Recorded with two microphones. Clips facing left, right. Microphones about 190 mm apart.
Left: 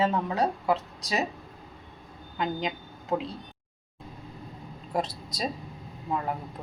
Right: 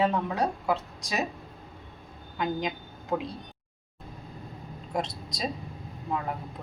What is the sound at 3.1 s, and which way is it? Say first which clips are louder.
Speech: left 1 dB; 5° left (ahead or behind).